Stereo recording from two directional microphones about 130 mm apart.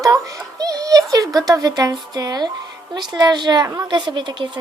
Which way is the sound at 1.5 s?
30° right (ahead or behind).